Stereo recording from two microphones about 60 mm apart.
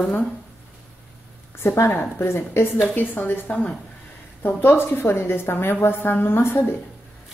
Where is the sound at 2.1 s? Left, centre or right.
Left.